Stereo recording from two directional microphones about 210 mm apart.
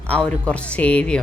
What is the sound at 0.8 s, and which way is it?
Speech, 5° left (ahead or behind).